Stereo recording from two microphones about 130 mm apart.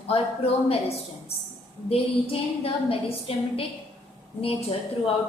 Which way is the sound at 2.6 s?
45° left (ahead or behind).